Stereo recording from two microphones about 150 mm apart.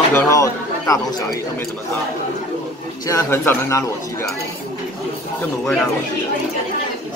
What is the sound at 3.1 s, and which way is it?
Speech, 20° left (ahead or behind).